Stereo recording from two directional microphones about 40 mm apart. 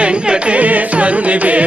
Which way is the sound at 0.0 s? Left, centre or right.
Right.